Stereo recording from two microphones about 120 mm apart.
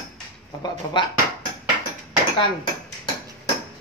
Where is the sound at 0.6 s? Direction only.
40° left (ahead or behind).